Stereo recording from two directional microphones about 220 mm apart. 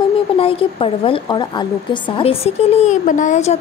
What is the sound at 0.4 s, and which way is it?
A woman's voice, 25° left (ahead or behind).